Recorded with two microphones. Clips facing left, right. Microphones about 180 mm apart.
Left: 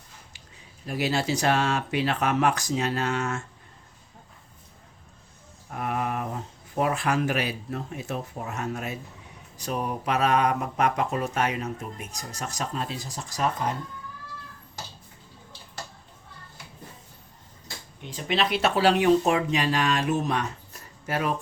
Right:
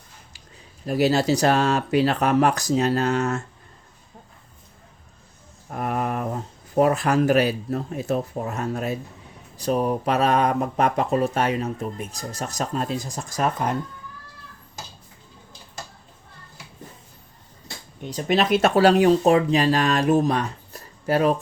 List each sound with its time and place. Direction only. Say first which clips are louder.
0.9 s speech: right 7 dB; 40° right (ahead or behind)
5.7 s speech: right 3 dB; 40° right (ahead or behind)
18.0 s speech: right 5 dB; 45° right (ahead or behind)